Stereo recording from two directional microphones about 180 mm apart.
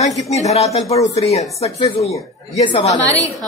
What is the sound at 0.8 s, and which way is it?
Speech, 20° left (ahead or behind).